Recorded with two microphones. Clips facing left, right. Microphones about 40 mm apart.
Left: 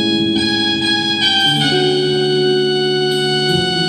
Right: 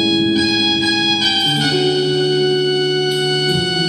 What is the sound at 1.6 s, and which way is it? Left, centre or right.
Music, left.